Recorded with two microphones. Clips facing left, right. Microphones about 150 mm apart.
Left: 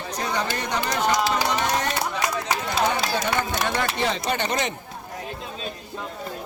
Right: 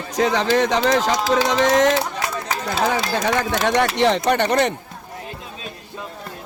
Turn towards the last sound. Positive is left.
turn(degrees=-60)  # may be behind; listen again after turning